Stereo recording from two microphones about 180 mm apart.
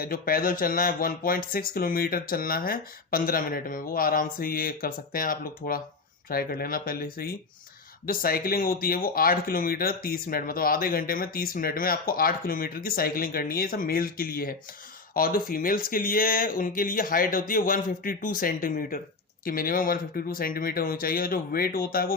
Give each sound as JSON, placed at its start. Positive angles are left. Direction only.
{"t": 0.0, "sound": "speech", "side_deg": 55}